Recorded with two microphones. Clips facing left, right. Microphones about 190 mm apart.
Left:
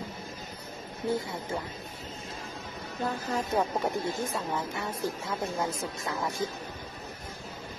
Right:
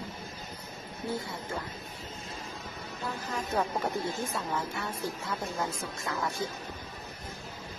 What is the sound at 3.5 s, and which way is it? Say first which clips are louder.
Speech: left 1 dB; 15° left (ahead or behind).